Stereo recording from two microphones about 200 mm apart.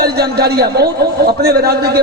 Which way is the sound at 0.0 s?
50° right (ahead or behind).